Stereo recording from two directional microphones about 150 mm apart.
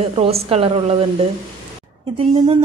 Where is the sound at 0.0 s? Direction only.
40° right (ahead or behind).